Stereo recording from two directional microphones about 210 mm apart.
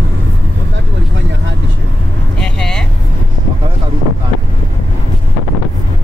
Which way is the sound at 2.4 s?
5° left (ahead or behind).